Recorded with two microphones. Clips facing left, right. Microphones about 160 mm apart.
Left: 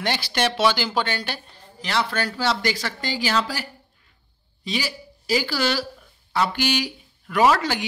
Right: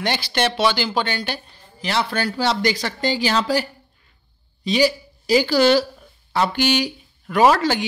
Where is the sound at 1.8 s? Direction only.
15° right (ahead or behind).